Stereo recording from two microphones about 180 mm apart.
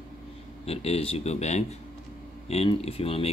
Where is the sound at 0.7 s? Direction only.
35° left (ahead or behind).